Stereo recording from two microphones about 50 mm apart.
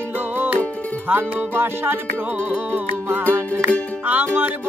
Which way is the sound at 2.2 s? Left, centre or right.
Right.